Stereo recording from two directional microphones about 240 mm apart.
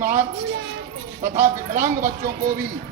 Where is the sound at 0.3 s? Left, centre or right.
Right.